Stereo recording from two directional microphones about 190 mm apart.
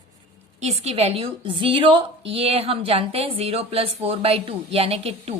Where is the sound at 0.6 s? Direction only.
35° right (ahead or behind).